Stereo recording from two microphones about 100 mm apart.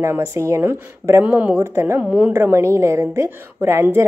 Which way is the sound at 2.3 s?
25° right (ahead or behind).